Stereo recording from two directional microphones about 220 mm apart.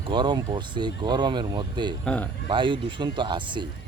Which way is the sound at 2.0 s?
5° left (ahead or behind).